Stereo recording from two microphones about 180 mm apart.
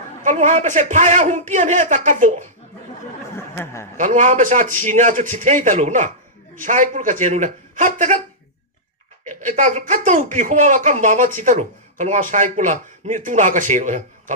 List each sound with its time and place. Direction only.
0.2 s speech: 45° right (ahead or behind)
3.3 s speech: 15° left (ahead or behind)
3.9 s speech: 45° right (ahead or behind)
9.4 s speech: 45° right (ahead or behind)